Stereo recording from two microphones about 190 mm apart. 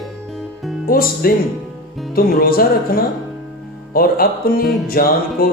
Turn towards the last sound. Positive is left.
turn(degrees=50)  # may be behind; listen again after turning